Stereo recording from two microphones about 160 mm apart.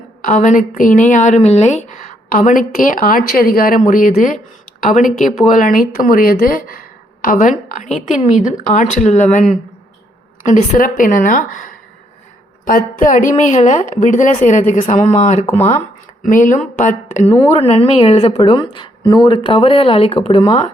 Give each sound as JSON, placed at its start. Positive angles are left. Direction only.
{"t": 0.2, "sound": "a woman's voice", "side_deg": 55}
{"t": 15.4, "sound": "speech", "side_deg": 15}
{"t": 16.2, "sound": "a woman's voice", "side_deg": 55}
{"t": 17.4, "sound": "a woman's voice", "side_deg": 35}